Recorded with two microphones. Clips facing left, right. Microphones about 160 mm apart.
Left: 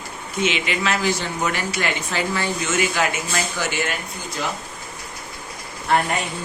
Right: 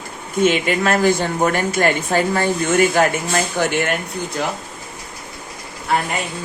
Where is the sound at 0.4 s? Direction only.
50° right (ahead or behind).